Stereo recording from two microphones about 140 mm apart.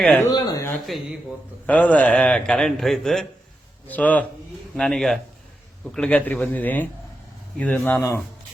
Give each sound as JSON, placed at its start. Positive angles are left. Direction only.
{"t": 0.0, "sound": "a man's voice", "side_deg": 10}
{"t": 0.3, "sound": "speech", "side_deg": 30}
{"t": 1.6, "sound": "a man's voice", "side_deg": 10}